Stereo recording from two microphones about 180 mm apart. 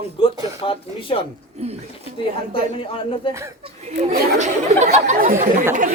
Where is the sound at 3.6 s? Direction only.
40° right (ahead or behind).